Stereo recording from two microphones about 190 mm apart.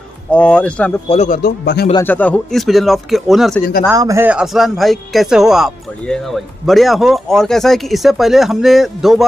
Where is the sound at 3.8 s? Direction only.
15° right (ahead or behind).